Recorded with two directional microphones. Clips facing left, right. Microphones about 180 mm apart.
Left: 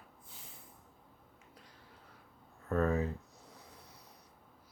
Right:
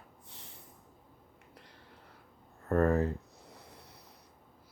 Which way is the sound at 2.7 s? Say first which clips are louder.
Right 4 dB; 60° right (ahead or behind).